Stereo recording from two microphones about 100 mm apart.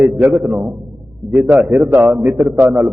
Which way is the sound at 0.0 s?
15° right (ahead or behind).